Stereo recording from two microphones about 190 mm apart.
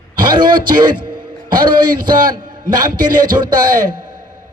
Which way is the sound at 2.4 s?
45° right (ahead or behind).